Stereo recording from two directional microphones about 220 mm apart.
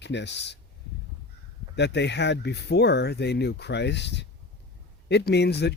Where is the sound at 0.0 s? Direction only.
50° left (ahead or behind).